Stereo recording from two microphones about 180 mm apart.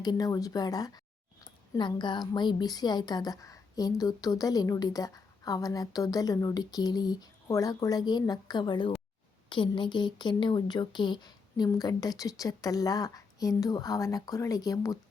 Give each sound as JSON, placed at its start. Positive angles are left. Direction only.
{"t": 0.0, "sound": "a woman's voice", "side_deg": 20}